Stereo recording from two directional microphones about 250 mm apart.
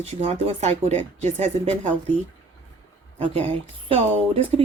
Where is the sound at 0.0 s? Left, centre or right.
Right.